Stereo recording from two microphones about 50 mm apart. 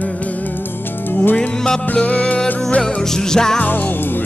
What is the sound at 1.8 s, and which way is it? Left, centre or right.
Music, left.